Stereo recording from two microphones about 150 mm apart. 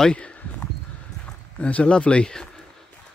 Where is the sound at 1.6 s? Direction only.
5° left (ahead or behind).